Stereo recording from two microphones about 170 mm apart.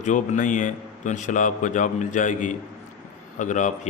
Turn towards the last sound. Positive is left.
turn(degrees=45)  # may be behind; listen again after turning